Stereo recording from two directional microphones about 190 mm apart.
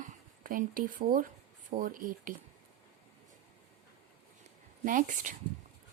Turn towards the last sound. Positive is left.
turn(degrees=-45)  # may be behind; listen again after turning